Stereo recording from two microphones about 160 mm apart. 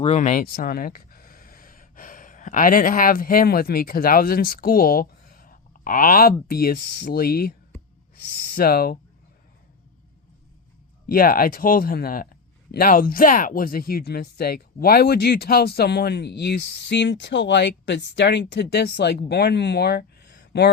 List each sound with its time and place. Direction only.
0.0 s speech: 45° left (ahead or behind); by 9.0 s 65° left (ahead or behind)
11.0 s a man's voice: 65° left (ahead or behind); by 20.7 s 90° left